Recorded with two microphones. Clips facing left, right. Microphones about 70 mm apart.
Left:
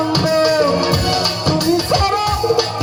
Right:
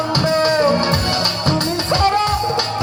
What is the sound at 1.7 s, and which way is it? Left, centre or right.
Music, right.